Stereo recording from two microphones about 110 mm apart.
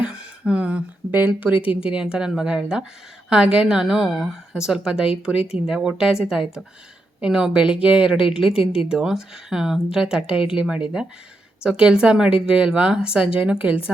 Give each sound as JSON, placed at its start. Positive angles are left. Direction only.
{"t": 0.0, "sound": "speech", "side_deg": -10}
{"t": 8.4, "sound": "speech", "side_deg": 60}
{"t": 8.8, "sound": "speech", "side_deg": -5}